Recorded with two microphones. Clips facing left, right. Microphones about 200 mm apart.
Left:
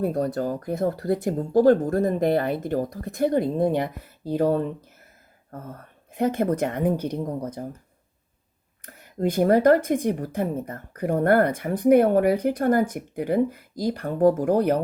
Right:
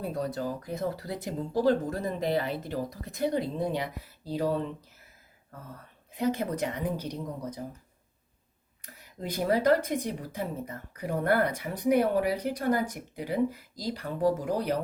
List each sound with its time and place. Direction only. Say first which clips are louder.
0.0 s speech: left 7 dB; 50° left (ahead or behind)
8.8 s speech: left 13 dB; 50° left (ahead or behind)